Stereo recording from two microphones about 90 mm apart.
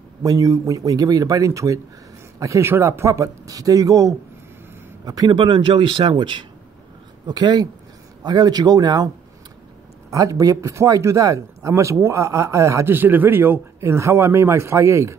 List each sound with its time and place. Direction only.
0.2 s a man's voice: 40° right (ahead or behind)
5.3 s speech: 60° right (ahead or behind)
7.2 s speech: 50° right (ahead or behind)
10.1 s speech: 40° right (ahead or behind)
12.9 s speech: 20° right (ahead or behind)